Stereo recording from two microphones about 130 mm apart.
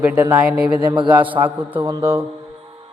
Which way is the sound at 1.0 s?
40° right (ahead or behind).